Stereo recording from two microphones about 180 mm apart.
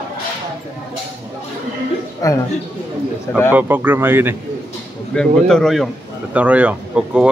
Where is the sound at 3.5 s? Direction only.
10° right (ahead or behind).